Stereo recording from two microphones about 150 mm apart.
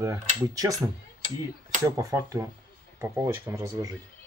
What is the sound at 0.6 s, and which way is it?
Speech, 25° right (ahead or behind).